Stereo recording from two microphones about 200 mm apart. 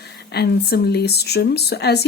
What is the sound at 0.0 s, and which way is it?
Speech, 55° left (ahead or behind).